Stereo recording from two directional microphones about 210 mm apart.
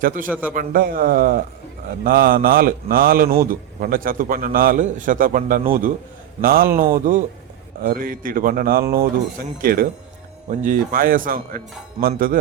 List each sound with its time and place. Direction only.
0.0 s a man's voice: 40° right (ahead or behind)